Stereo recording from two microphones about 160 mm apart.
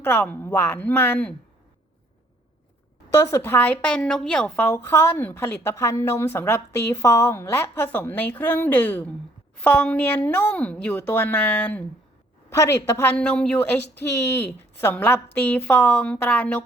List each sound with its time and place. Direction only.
0.0 s speech: 10° left (ahead or behind)
3.1 s speech: 20° left (ahead or behind)